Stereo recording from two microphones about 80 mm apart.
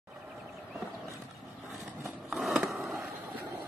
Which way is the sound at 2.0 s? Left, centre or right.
Centre.